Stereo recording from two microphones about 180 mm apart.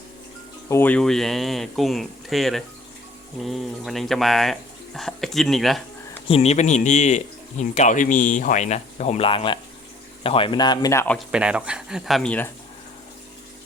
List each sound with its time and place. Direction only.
0.7 s speech: 10° left (ahead or behind)
6.2 s speech: 35° left (ahead or behind); by 11.2 s 10° left (ahead or behind)
11.3 s speech: 5° right (ahead or behind)